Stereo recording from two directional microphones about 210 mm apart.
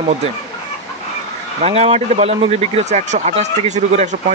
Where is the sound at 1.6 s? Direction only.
30° right (ahead or behind).